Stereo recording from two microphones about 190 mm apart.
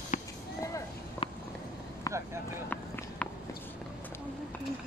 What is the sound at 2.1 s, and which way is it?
Vehicle, 20° left (ahead or behind).